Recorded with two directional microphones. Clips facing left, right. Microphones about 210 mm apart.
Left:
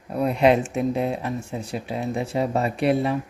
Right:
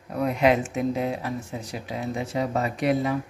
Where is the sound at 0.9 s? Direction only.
30° left (ahead or behind).